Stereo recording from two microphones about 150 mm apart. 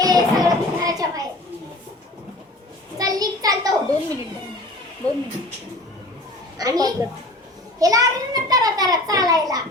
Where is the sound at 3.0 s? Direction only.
25° right (ahead or behind).